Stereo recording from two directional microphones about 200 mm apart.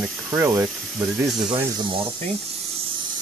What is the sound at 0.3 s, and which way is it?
Speech, 15° right (ahead or behind).